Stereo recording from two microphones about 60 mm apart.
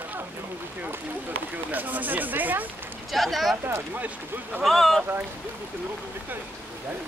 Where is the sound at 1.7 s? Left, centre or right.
Right.